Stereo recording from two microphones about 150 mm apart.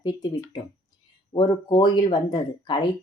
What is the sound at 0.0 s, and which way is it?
Speech, 25° left (ahead or behind).